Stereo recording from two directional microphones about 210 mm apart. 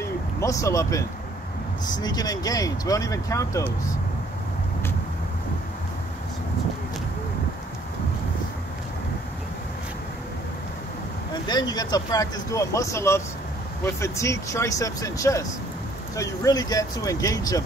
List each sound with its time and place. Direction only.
0.0 s vehicle: 15° left (ahead or behind)
1.9 s speech: 20° left (ahead or behind)
11.4 s speech: 20° left (ahead or behind)